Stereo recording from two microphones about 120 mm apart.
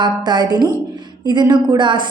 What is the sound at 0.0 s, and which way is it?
A woman's voice, 35° right (ahead or behind).